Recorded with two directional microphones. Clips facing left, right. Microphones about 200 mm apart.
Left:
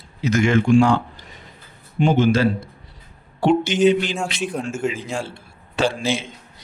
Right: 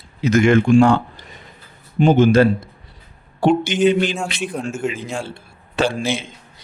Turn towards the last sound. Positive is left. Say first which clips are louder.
# right 1 dB
turn(degrees=-55)  # may be behind; listen again after turning